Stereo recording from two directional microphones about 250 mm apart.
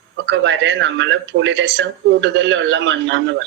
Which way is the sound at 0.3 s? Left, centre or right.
Right.